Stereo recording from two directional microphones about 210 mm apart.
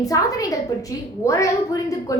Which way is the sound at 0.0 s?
15° left (ahead or behind).